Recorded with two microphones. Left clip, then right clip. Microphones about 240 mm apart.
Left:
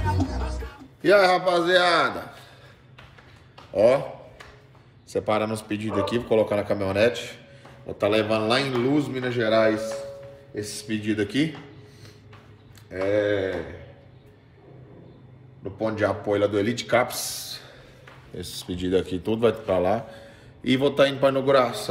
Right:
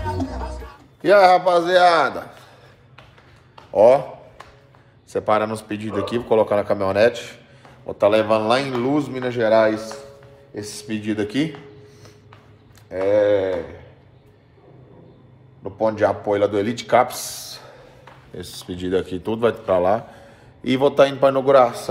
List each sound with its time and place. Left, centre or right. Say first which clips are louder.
0.0 s music: right 1 dB; right
1.0 s speech: right 5 dB; centre
3.7 s a sound: right 6 dB; centre
5.1 s speech: right 5 dB; centre
12.9 s speech: right 6 dB; centre
15.8 s a man's voice: right 6 dB; centre